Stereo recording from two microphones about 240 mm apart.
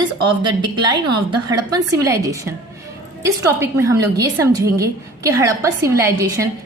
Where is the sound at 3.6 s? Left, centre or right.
Centre.